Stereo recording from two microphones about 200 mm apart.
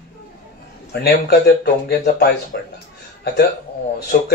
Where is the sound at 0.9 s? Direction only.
50° left (ahead or behind).